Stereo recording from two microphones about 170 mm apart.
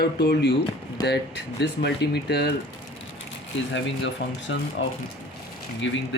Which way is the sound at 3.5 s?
90° left.